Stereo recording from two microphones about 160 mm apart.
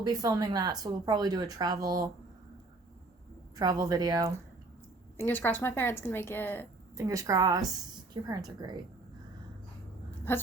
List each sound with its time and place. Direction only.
0.0 s speech: 25° right (ahead or behind)
3.5 s speech: 25° right (ahead or behind)
5.1 s speech: 10° left (ahead or behind)
6.9 s speech: 20° right (ahead or behind)